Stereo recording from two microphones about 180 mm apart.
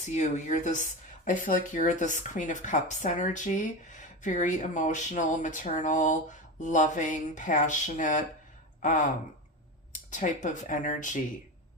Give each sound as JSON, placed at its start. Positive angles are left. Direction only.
{"t": 0.2, "sound": "speech", "side_deg": 40}